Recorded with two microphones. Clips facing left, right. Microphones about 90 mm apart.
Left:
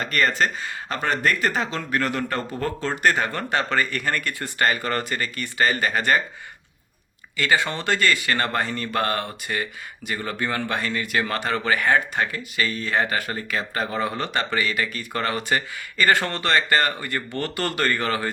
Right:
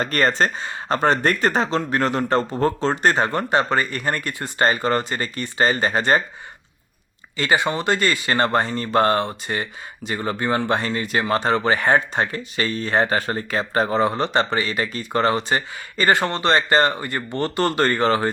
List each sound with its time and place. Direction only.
0.0 s speech: 35° right (ahead or behind)
7.3 s speech: 20° right (ahead or behind)